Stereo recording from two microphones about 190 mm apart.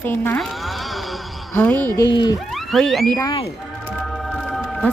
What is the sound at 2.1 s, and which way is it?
Speech, 25° left (ahead or behind).